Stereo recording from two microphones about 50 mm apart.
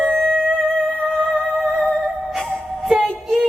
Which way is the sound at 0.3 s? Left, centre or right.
Right.